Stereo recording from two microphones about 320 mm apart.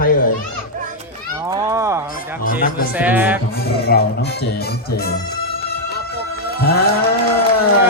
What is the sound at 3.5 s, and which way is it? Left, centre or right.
Speech, left.